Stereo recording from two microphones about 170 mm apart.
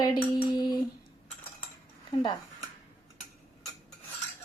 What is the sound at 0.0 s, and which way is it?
Female singing, 25° left (ahead or behind).